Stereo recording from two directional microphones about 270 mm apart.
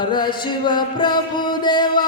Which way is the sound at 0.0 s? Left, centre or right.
Centre.